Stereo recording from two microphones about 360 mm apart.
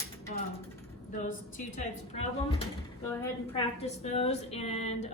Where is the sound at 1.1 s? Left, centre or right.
Left.